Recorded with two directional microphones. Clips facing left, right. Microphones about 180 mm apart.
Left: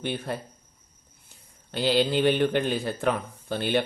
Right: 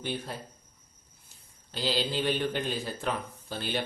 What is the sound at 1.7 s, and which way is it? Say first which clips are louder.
Speech: left 7 dB; 60° left (ahead or behind).